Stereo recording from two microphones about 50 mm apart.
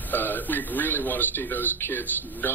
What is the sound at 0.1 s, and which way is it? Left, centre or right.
A man's voice, left.